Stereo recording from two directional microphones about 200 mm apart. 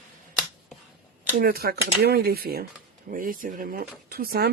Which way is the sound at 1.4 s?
50° right (ahead or behind).